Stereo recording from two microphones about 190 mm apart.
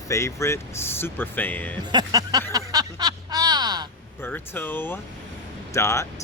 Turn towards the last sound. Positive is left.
turn(degrees=15)  # may be behind; listen again after turning